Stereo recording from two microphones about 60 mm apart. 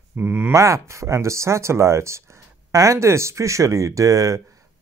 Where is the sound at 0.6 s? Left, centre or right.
Right.